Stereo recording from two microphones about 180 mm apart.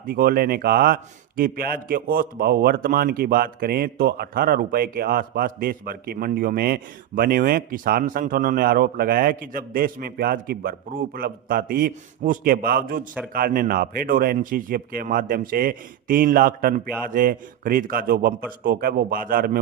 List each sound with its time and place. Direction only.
0.0 s a man's voice: 55° right (ahead or behind)